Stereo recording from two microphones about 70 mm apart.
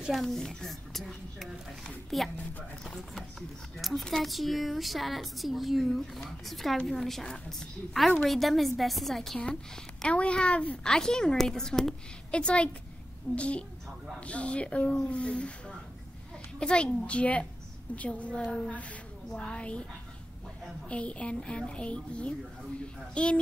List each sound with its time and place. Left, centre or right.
0.1 s speech: centre
10.0 s a woman's voice: centre
16.5 s a woman's voice: centre
20.9 s a woman's voice: centre